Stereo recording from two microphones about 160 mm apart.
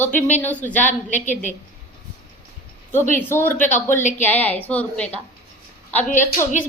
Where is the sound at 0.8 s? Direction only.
50° left (ahead or behind).